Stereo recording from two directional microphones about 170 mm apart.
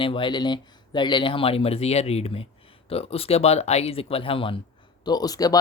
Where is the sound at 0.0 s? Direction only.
30° left (ahead or behind).